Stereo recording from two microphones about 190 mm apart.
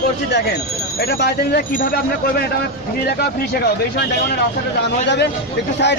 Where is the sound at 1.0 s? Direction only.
55° left (ahead or behind).